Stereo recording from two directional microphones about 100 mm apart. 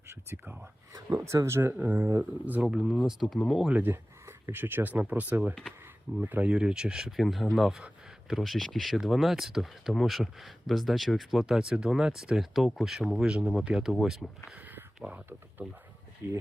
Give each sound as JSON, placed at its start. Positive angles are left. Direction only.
{"t": 0.1, "sound": "speech", "side_deg": -25}
{"t": 3.7, "sound": "speech", "side_deg": -20}
{"t": 14.8, "sound": "speech", "side_deg": -20}